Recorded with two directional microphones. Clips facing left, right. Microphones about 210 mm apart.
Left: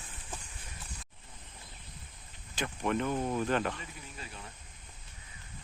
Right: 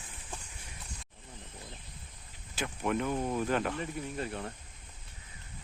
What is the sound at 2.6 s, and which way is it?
Speech, 5° right (ahead or behind).